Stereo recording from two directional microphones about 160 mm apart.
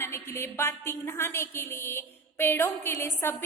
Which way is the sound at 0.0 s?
15° left (ahead or behind).